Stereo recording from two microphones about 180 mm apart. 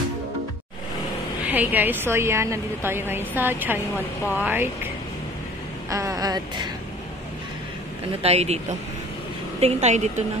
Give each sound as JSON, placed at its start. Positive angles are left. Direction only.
{"t": 1.4, "sound": "a woman's voice", "side_deg": -10}
{"t": 5.9, "sound": "speech", "side_deg": -20}
{"t": 8.2, "sound": "a woman's voice", "side_deg": -35}
{"t": 9.6, "sound": "a woman's voice", "side_deg": -35}